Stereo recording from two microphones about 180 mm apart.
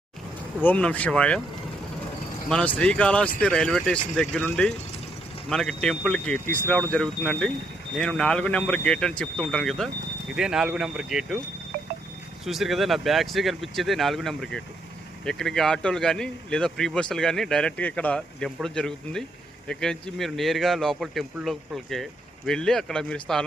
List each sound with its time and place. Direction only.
0.6 s speech: 10° left (ahead or behind)
2.5 s a man's voice: 5° left (ahead or behind)
11.7 s a sound: 60° right (ahead or behind)
12.5 s a man's voice: centre (ahead or behind)